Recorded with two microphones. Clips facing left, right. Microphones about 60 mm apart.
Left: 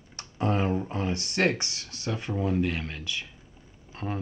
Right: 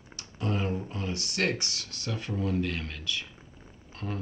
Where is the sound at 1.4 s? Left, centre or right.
Left.